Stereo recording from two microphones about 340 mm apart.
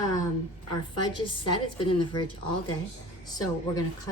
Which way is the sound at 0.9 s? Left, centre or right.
Centre.